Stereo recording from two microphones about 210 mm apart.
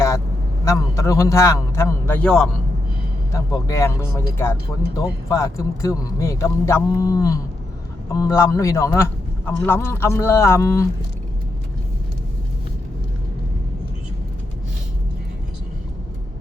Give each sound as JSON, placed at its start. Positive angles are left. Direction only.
{"t": 0.6, "sound": "speech", "side_deg": 15}
{"t": 3.3, "sound": "speech", "side_deg": 15}